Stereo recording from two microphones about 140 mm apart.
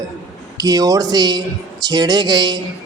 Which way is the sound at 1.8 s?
30° right (ahead or behind).